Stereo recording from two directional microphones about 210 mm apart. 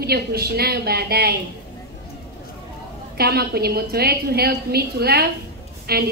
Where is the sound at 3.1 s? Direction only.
50° right (ahead or behind).